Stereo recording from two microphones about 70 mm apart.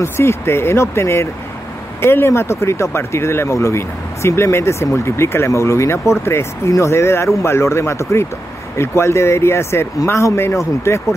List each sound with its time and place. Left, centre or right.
0.0 s speech: left